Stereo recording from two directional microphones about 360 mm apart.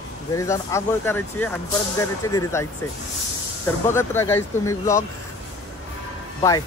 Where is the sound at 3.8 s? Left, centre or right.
Centre.